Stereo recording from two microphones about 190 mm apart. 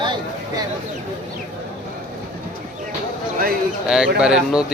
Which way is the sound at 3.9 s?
5° right (ahead or behind).